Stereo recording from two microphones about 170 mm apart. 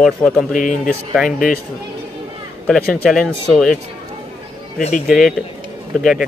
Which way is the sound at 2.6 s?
5° left (ahead or behind).